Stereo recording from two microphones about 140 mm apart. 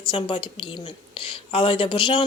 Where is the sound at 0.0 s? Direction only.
40° left (ahead or behind).